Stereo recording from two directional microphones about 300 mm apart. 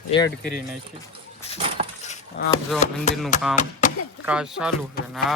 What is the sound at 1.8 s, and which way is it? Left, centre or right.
Keys jangling, right.